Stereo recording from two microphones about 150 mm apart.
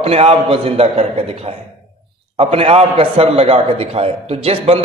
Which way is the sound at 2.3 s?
40° right (ahead or behind).